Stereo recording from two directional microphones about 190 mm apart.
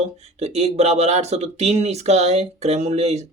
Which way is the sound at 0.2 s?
35° right (ahead or behind).